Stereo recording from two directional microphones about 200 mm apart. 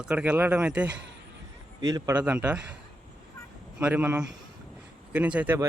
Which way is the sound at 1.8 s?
20° right (ahead or behind).